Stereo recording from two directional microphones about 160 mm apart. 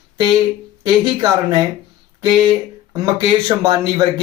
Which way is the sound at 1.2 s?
25° right (ahead or behind).